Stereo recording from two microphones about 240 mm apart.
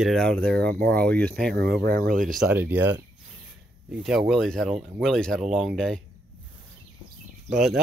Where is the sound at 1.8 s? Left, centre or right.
Right.